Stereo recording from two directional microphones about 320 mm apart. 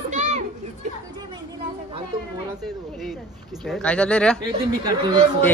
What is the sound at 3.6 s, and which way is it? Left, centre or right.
Speech, centre.